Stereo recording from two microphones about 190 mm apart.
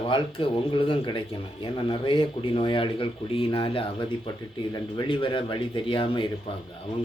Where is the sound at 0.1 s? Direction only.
25° left (ahead or behind).